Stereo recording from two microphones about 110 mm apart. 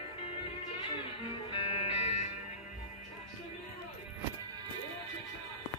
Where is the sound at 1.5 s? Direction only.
60° left (ahead or behind).